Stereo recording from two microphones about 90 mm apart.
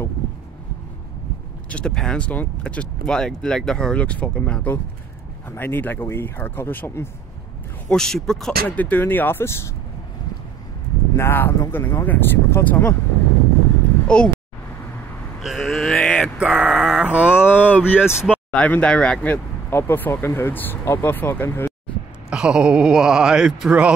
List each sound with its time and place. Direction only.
1.7 s speech: 10° left (ahead or behind)
7.9 s speech: 5° left (ahead or behind)
8.6 s speech: 20° left (ahead or behind)
11.1 s speech: 25° left (ahead or behind)
14.0 s speech: 10° left (ahead or behind)
15.4 s a sound: centre (ahead or behind)
17.5 s a sound: 20° left (ahead or behind)
18.0 s speech: 10° right (ahead or behind)
18.5 s speech: 15° left (ahead or behind)
19.7 s speech: 25° left (ahead or behind)
22.3 s speech: 10° right (ahead or behind)